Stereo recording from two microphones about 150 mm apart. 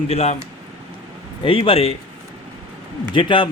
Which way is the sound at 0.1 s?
45° left (ahead or behind).